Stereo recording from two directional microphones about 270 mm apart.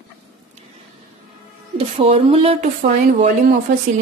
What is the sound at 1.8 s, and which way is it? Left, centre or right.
Speech, right.